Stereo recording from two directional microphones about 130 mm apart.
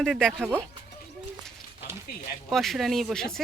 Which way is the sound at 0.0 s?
Centre (ahead or behind).